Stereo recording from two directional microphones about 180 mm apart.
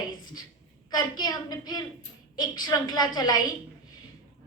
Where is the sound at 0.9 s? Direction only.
25° left (ahead or behind).